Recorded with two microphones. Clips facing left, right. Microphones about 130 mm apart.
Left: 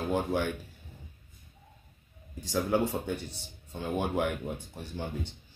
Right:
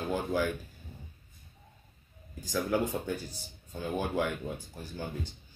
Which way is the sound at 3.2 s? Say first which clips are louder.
Even; 25° left (ahead or behind).